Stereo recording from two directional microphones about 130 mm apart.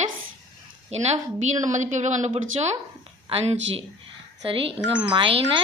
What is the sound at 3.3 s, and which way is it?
A woman's voice, 45° right (ahead or behind).